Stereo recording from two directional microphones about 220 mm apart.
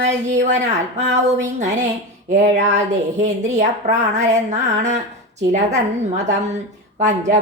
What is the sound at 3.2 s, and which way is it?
A woman's voice, 35° right (ahead or behind).